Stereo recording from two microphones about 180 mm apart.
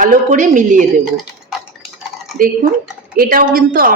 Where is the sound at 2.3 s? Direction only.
50° right (ahead or behind).